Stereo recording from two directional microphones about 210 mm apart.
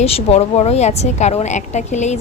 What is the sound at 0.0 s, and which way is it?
A woman's voice, 30° left (ahead or behind).